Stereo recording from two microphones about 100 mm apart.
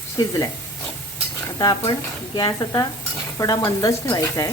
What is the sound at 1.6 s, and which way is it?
Speech, 45° left (ahead or behind).